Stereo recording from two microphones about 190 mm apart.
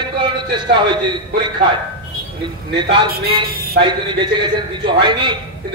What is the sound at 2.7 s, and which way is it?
A man's voice, 25° right (ahead or behind).